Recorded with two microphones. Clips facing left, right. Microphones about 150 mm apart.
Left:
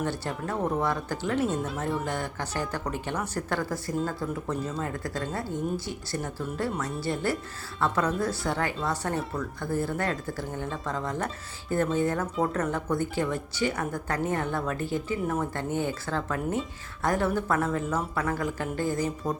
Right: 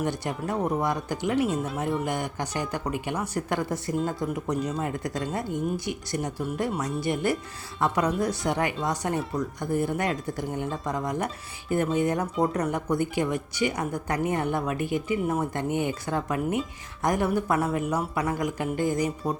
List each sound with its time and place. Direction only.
0.0 s speech: 15° right (ahead or behind)
2.0 s speech: 15° right (ahead or behind)